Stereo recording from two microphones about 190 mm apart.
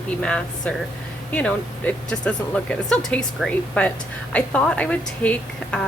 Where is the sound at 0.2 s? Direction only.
5° left (ahead or behind).